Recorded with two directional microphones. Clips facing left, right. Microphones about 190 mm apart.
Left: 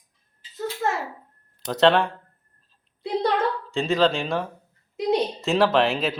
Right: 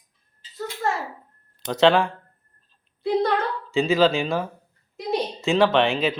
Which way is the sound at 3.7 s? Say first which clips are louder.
Right 4 dB; centre (ahead or behind).